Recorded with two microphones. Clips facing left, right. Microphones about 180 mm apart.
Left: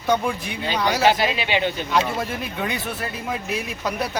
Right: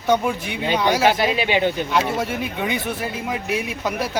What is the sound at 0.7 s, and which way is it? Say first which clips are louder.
Speech: right 1 dB; 15° right (ahead or behind).